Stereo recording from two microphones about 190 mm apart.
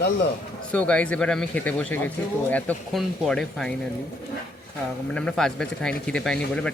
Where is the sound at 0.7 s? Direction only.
5° left (ahead or behind).